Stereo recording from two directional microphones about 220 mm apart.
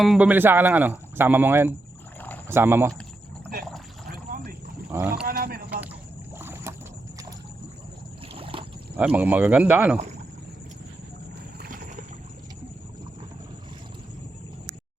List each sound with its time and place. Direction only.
0.0 s speech: 5° right (ahead or behind)
4.1 s a sound: 45° right (ahead or behind)
4.9 s speech: 5° right (ahead or behind)
5.2 s a sound: 45° right (ahead or behind)
6.4 s boat: 10° right (ahead or behind)
8.4 s boat: 25° right (ahead or behind)
9.0 s speech: 10° right (ahead or behind)
11.7 s boat: 40° right (ahead or behind)